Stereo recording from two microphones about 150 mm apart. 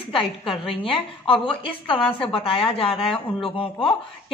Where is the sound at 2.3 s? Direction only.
40° left (ahead or behind).